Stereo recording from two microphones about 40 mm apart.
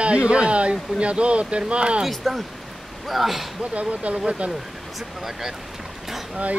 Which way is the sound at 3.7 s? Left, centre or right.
Right.